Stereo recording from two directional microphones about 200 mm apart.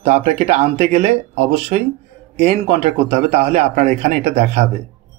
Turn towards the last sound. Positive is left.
turn(degrees=-35)  # may be behind; listen again after turning